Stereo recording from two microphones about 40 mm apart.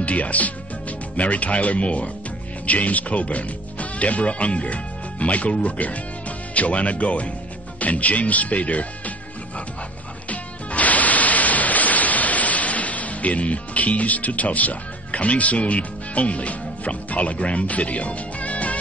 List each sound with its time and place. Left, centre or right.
0.0 s speech: left
10.3 s music: left